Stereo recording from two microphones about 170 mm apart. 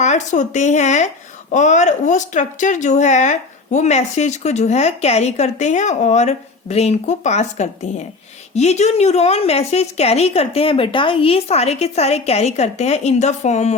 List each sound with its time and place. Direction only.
0.0 s a woman's voice: 45° left (ahead or behind)